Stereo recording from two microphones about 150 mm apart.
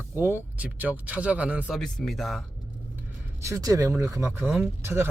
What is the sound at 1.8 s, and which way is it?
Speech, centre (ahead or behind).